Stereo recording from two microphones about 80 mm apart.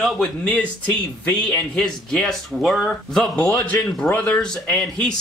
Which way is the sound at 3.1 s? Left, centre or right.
Centre.